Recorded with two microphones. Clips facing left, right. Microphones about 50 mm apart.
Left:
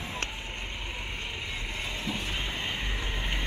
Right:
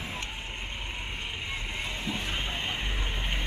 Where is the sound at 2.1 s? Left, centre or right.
Centre.